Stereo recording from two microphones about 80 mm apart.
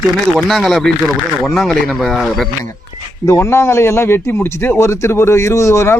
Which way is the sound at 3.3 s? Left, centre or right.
Left.